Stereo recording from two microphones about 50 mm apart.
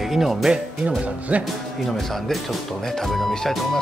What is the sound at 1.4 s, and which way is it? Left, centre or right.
Speech, centre.